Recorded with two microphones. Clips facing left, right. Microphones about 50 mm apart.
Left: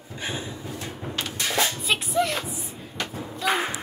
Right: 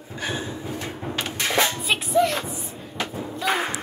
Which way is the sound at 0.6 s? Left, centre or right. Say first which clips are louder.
Right 4 dB; right.